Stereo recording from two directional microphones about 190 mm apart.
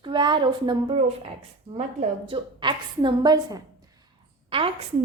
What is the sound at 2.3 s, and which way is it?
A woman's voice, 25° right (ahead or behind).